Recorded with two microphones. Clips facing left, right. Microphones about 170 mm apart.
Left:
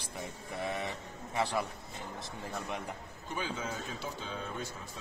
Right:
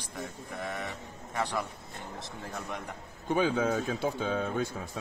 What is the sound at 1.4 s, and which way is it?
Speech, 10° left (ahead or behind).